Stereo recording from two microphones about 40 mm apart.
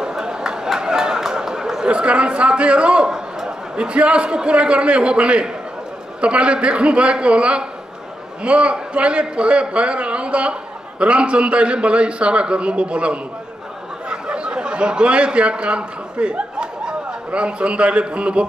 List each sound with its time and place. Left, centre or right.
0.0 s chatter: centre
3.1 s a sound: centre
3.7 s a man's voice: right